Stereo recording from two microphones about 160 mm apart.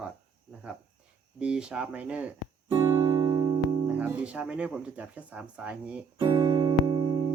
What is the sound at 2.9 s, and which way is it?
Music, 20° right (ahead or behind).